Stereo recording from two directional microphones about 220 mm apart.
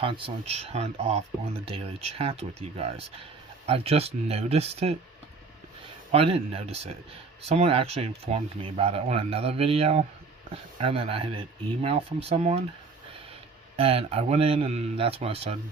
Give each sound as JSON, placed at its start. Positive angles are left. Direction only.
{"t": 0.0, "sound": "speech", "side_deg": -25}
{"t": 6.1, "sound": "speech", "side_deg": -25}
{"t": 13.7, "sound": "speech", "side_deg": -25}